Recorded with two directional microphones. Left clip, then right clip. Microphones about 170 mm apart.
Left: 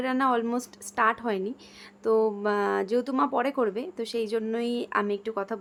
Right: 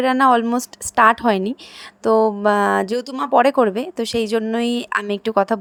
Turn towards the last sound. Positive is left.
turn(degrees=-50)  # may be behind; listen again after turning